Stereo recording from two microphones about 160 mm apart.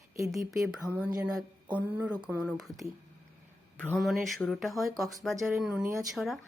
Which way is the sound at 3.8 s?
5° left (ahead or behind).